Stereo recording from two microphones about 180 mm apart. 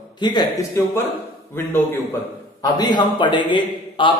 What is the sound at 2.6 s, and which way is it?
A man's voice, 25° left (ahead or behind).